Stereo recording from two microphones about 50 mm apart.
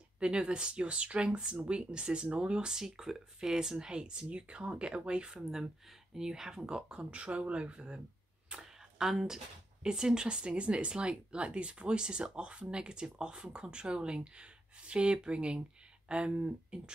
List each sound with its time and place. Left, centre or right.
0.2 s speech: centre
2.7 s speech: centre
8.9 s speech: centre